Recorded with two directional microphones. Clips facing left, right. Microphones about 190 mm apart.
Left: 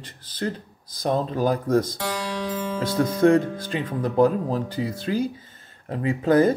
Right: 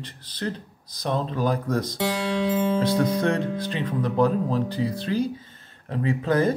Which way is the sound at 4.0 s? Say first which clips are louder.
Left 2 dB; 40° left (ahead or behind).